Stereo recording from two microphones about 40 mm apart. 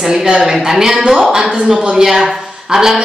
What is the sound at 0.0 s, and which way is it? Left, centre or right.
A woman's voice, centre.